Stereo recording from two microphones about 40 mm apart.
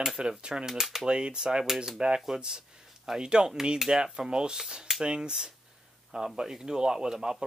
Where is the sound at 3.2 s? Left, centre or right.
Right.